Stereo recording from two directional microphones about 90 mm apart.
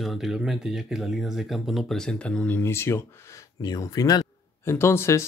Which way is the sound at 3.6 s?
45° left (ahead or behind).